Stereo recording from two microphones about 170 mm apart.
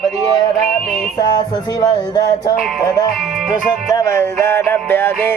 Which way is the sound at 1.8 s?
20° left (ahead or behind).